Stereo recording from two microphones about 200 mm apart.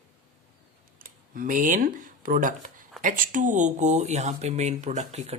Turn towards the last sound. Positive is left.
turn(degrees=-35)  # may be behind; listen again after turning